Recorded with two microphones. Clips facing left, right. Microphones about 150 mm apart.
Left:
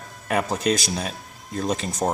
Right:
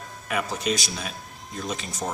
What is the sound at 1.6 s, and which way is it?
Speech, 40° left (ahead or behind).